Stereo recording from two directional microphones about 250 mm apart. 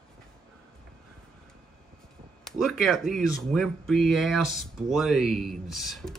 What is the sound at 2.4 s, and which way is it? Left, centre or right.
Speech, centre.